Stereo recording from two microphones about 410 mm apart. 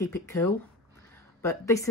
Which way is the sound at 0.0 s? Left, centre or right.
Centre.